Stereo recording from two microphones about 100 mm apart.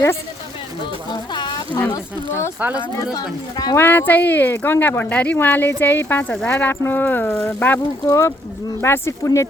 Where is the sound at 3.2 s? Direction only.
40° left (ahead or behind).